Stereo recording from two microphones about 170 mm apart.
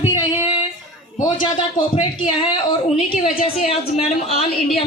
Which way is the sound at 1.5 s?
30° left (ahead or behind).